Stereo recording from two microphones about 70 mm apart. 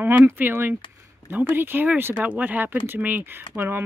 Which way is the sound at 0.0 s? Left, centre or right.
Right.